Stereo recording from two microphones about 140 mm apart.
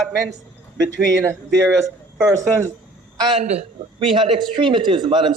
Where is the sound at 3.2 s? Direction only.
35° right (ahead or behind).